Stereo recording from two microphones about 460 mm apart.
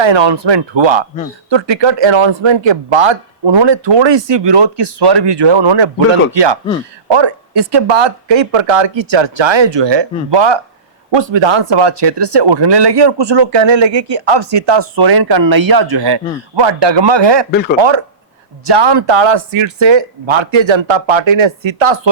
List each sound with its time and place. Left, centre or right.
0.0 s speech: right
17.5 s speech: centre
17.7 s speech: right